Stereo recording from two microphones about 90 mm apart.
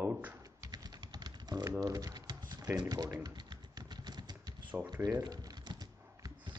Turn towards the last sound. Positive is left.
turn(degrees=-50)  # may be behind; listen again after turning